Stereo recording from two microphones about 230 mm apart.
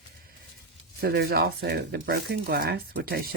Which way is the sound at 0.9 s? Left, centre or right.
Right.